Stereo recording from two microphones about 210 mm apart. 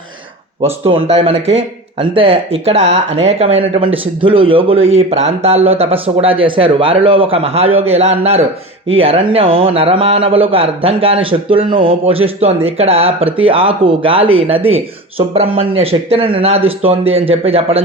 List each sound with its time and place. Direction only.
0.6 s speech: 25° right (ahead or behind)